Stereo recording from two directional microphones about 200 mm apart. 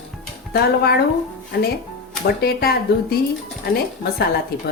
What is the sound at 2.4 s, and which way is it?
Speech, 50° left (ahead or behind).